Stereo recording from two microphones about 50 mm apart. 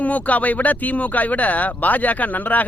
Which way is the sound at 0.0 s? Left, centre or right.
Left.